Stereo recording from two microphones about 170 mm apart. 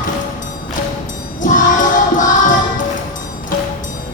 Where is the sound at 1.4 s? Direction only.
50° left (ahead or behind).